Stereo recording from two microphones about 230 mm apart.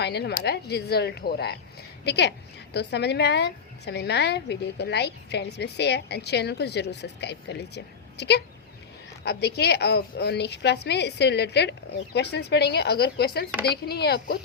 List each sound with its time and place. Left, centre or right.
0.0 s a woman's voice: left